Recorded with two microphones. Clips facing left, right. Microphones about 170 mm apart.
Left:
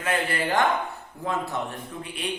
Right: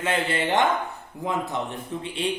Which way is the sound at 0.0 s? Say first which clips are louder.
Right 1 dB; 25° right (ahead or behind).